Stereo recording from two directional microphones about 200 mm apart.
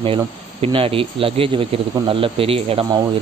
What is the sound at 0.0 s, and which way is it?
A man's voice, 25° right (ahead or behind).